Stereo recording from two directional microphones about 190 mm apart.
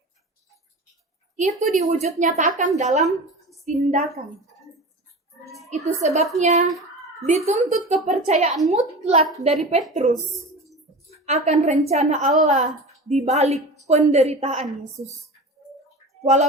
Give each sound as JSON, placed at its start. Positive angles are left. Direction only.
{"t": 1.4, "sound": "a woman's voice", "side_deg": -40}
{"t": 5.5, "sound": "a sound", "side_deg": 0}
{"t": 5.7, "sound": "a woman's voice", "side_deg": -35}
{"t": 6.7, "sound": "a sound", "side_deg": 0}
{"t": 7.3, "sound": "a woman's voice", "side_deg": -40}
{"t": 11.3, "sound": "a woman's voice", "side_deg": -40}
{"t": 16.2, "sound": "a woman's voice", "side_deg": -35}